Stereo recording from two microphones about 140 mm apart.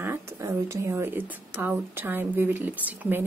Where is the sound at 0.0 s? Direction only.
15° right (ahead or behind).